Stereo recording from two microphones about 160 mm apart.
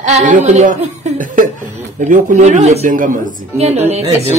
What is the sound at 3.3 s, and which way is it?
Speech, 45° right (ahead or behind).